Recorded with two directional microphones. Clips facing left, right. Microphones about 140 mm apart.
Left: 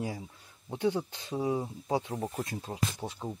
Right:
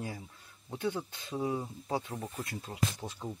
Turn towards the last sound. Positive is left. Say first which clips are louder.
# left 1 dB
turn(degrees=25)  # may be behind; listen again after turning